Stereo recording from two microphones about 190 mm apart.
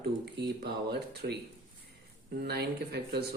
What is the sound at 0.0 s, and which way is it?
Speech, 60° right (ahead or behind).